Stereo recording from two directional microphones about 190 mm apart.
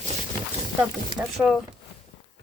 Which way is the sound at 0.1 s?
35° right (ahead or behind).